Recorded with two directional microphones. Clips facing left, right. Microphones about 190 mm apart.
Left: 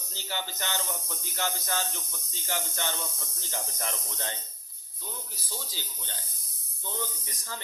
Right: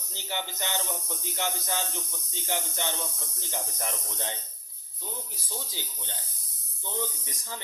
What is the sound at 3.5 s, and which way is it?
Speech, 15° right (ahead or behind).